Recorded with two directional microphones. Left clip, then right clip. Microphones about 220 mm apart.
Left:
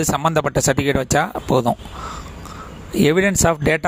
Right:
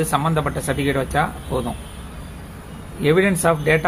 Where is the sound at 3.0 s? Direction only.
50° left (ahead or behind).